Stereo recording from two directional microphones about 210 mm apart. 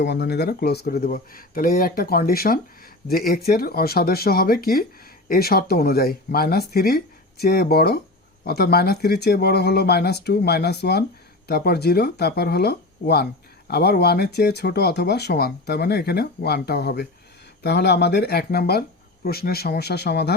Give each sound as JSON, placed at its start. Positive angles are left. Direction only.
{"t": 0.0, "sound": "speech", "side_deg": 50}